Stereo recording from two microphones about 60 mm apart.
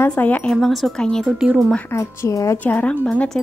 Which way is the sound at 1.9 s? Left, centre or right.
Left.